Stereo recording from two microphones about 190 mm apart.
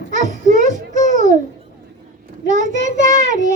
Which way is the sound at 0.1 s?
40° right (ahead or behind).